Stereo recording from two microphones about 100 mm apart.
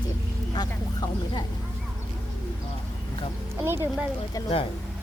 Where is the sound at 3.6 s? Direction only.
25° right (ahead or behind).